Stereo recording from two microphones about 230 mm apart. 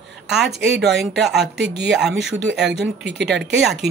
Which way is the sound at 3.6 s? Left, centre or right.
Centre.